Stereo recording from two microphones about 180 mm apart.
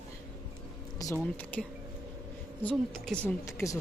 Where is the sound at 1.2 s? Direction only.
10° left (ahead or behind).